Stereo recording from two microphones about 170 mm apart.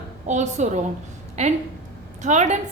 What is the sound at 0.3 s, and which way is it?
A woman's voice, 45° right (ahead or behind).